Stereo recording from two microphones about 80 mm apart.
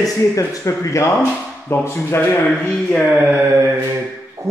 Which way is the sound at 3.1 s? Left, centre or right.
Right.